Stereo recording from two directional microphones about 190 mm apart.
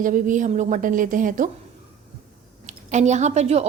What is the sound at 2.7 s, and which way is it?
Speech, 40° right (ahead or behind).